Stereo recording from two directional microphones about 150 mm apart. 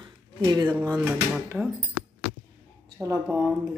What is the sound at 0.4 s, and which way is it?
Speech, 25° right (ahead or behind).